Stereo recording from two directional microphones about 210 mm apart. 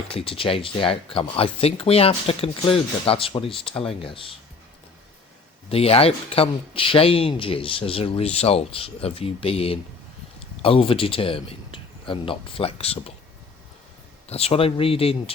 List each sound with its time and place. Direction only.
0.1 s speech: 25° left (ahead or behind)
5.6 s speech: 30° left (ahead or behind)
14.3 s speech: 30° left (ahead or behind)